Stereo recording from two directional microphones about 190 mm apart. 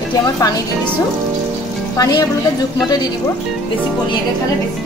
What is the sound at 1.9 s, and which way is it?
Speech, 20° left (ahead or behind).